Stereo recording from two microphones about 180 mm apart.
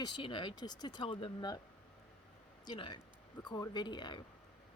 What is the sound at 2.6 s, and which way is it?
Speech, 25° left (ahead or behind).